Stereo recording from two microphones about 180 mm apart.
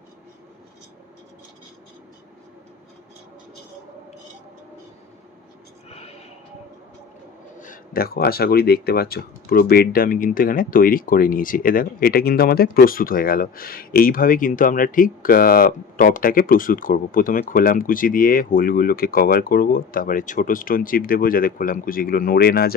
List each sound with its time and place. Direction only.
7.6 s speech: 50° left (ahead or behind)